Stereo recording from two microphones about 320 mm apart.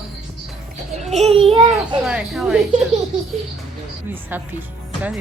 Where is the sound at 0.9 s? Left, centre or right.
Right.